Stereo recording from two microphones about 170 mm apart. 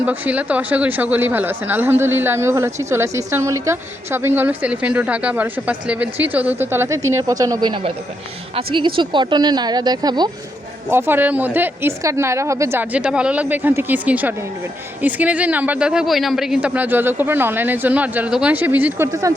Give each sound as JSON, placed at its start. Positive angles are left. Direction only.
{"t": 0.0, "sound": "speech", "side_deg": -10}
{"t": 10.8, "sound": "speech", "side_deg": -10}